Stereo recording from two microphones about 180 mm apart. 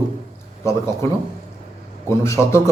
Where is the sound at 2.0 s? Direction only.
15° left (ahead or behind).